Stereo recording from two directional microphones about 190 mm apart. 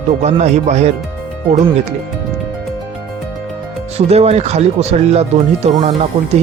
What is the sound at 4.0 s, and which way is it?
Speech, 35° right (ahead or behind).